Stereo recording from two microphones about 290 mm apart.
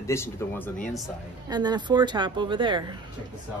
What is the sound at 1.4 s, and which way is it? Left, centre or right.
A woman's voice, centre.